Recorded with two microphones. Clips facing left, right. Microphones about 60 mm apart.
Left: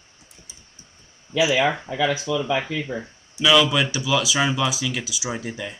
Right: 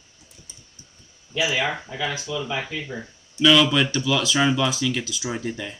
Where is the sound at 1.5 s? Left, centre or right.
Left.